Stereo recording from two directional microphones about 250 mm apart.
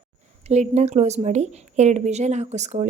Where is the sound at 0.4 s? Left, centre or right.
Right.